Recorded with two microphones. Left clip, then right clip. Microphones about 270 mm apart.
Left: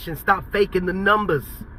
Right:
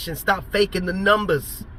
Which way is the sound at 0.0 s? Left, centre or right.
Centre.